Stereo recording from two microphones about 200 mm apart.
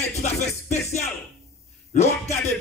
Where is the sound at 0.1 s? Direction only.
35° left (ahead or behind).